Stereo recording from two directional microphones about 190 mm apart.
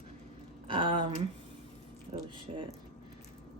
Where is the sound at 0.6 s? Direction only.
25° right (ahead or behind).